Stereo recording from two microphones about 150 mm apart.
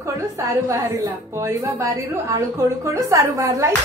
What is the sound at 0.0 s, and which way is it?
A woman's voice, 20° right (ahead or behind).